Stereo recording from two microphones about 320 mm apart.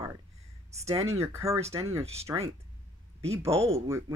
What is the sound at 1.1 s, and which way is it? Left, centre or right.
Speech, centre.